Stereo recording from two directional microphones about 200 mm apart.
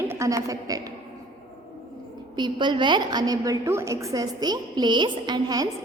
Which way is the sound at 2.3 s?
20° right (ahead or behind).